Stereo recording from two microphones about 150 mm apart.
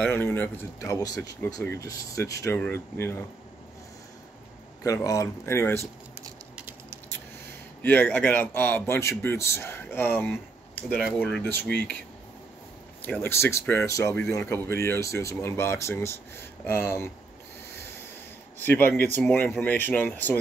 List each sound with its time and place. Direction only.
0.0 s speech: 15° left (ahead or behind)
4.8 s speech: 20° left (ahead or behind)
6.5 s patter: 15° right (ahead or behind)
7.8 s speech: 10° left (ahead or behind)
10.7 s a sound: 10° left (ahead or behind)
11.1 s speech: 5° left (ahead or behind)
13.0 s speech: 15° left (ahead or behind)
18.6 s speech: 10° left (ahead or behind)